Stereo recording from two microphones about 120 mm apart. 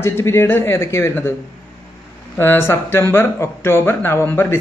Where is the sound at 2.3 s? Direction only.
20° left (ahead or behind).